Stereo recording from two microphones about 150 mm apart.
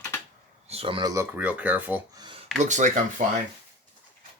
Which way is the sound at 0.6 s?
40° right (ahead or behind).